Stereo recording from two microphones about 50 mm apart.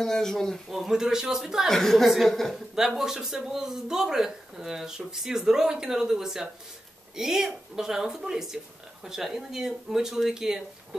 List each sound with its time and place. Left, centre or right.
0.0 s speech: centre
0.7 s speech: centre
1.7 s speech: centre
2.0 s a woman's voice: centre